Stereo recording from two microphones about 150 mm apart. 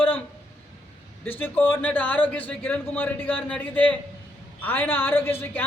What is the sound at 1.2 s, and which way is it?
A man's voice, 15° left (ahead or behind).